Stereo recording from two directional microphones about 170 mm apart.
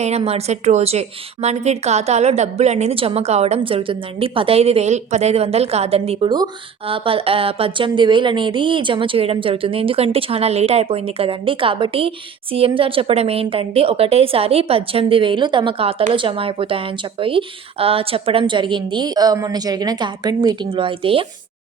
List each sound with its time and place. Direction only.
0.2 s a woman's voice: 35° right (ahead or behind)